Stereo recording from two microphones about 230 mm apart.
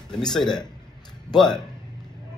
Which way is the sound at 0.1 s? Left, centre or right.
Centre.